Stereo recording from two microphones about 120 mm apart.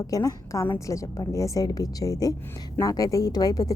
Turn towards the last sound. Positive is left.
turn(degrees=30)  # may be behind; listen again after turning